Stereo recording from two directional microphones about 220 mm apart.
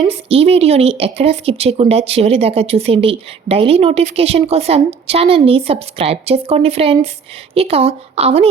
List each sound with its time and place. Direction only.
0.0 s a woman's voice: 25° right (ahead or behind)